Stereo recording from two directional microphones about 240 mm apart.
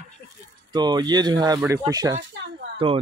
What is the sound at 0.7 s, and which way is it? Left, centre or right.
Speech, centre.